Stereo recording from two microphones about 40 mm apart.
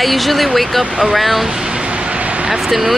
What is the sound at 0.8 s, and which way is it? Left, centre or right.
Speech, centre.